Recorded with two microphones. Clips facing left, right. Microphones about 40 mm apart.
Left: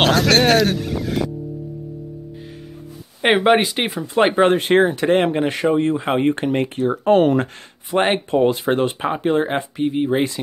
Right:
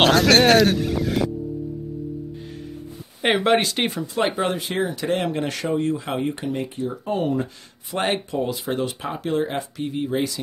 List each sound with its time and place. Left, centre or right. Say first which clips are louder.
0.0 s speech: even; centre
3.2 s speech: left 4 dB; left
4.0 s speech: left 10 dB; left
7.9 s speech: left 6 dB; left
8.4 s speech: left 8 dB; left